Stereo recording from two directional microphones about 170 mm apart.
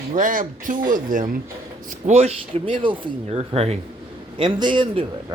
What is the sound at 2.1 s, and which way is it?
A man's voice, 40° right (ahead or behind).